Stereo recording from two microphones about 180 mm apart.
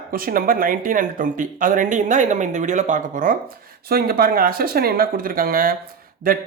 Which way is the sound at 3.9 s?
60° right (ahead or behind).